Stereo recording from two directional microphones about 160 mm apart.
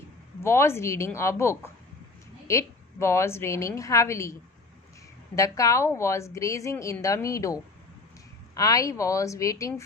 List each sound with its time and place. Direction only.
0.4 s a woman's voice: 15° left (ahead or behind)